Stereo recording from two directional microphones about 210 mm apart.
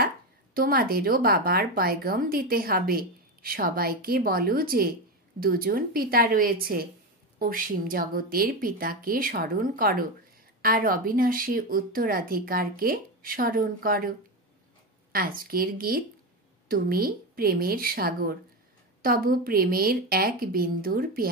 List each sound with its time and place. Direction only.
0.6 s speech: 45° right (ahead or behind)
15.1 s speech: 45° right (ahead or behind)